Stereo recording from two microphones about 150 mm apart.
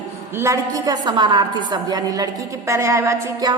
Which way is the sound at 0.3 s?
20° right (ahead or behind).